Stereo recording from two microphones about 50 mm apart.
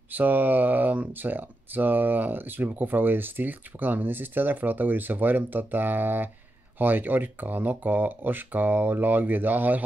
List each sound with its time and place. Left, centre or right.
0.1 s speech: right